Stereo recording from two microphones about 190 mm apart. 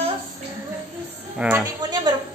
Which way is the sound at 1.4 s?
10° right (ahead or behind).